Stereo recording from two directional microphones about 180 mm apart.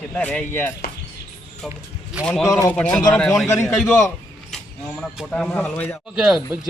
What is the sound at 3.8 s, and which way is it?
Speech, 5° left (ahead or behind).